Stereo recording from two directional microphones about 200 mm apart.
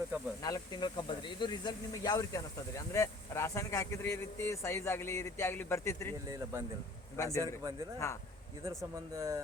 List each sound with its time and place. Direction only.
0.4 s speech: 20° left (ahead or behind)
6.2 s speech: 15° right (ahead or behind)
7.9 s speech: 15° left (ahead or behind)
8.8 s speech: 15° right (ahead or behind)